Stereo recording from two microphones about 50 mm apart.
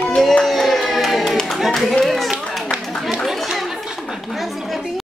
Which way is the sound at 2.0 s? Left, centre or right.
Centre.